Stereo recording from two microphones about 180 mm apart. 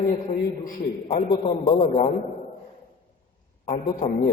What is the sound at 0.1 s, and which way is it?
A man's voice, 50° left (ahead or behind).